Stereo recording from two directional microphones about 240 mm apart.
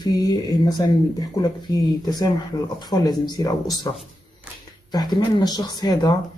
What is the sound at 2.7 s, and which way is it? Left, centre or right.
Speech, centre.